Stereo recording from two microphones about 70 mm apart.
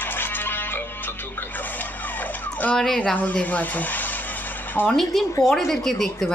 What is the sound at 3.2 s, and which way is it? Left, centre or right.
Speech, left.